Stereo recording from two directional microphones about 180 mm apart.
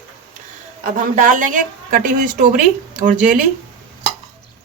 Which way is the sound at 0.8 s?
45° right (ahead or behind).